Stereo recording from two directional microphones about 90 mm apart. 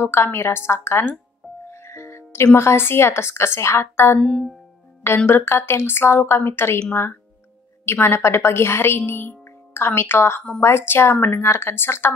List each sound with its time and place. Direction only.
0.0 s a woman's voice: 30° left (ahead or behind)
4.2 s speech: 10° left (ahead or behind)
5.0 s a woman's voice: 25° left (ahead or behind)